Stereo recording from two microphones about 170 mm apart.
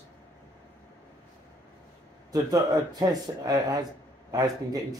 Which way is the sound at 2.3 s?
25° right (ahead or behind).